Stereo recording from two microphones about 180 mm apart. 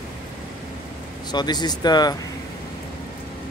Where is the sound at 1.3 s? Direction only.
25° left (ahead or behind).